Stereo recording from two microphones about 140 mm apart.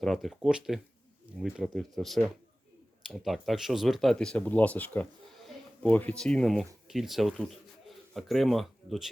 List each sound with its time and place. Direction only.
0.0 s speech: centre (ahead or behind)